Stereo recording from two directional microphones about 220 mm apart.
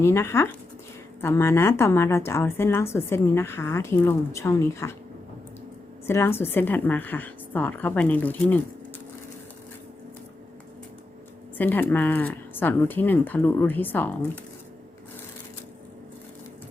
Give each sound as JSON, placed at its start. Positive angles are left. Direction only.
{"t": 0.0, "sound": "a woman's voice", "side_deg": 10}
{"t": 6.1, "sound": "a woman's voice", "side_deg": 10}
{"t": 11.5, "sound": "a woman's voice", "side_deg": 10}